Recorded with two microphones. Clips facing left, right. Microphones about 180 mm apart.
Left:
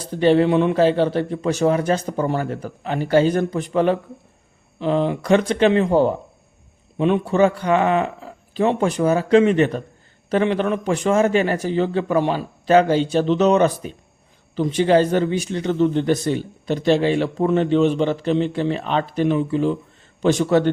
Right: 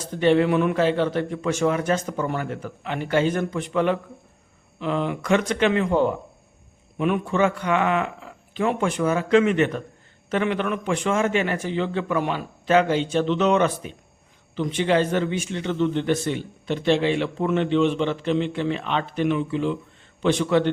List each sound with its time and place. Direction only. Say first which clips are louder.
0.0 s a man's voice: left 3 dB; 35° left (ahead or behind)